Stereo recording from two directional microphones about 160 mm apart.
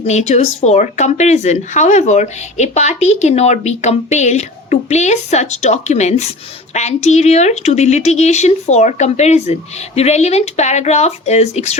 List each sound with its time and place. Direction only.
0.0 s speech: 45° left (ahead or behind)